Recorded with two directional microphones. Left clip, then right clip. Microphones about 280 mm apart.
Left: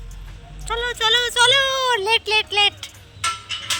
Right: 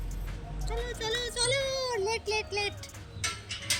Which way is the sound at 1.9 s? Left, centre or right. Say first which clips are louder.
Left 13 dB; left.